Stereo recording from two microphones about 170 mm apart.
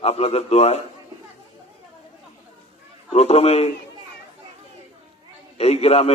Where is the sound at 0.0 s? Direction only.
35° left (ahead or behind).